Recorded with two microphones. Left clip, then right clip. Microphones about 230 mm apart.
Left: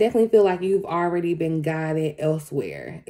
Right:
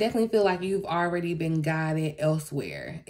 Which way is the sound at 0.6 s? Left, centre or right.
Right.